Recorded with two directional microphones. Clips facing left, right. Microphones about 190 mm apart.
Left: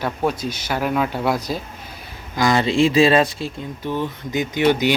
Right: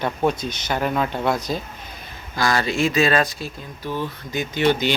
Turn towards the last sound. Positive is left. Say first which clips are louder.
# left 2 dB
turn(degrees=15)  # may be behind; listen again after turning